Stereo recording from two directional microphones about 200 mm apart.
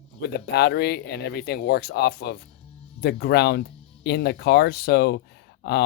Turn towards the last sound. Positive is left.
turn(degrees=55)  # may be behind; listen again after turning